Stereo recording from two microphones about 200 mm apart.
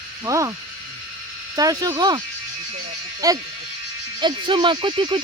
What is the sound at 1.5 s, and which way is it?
Speech, 20° right (ahead or behind).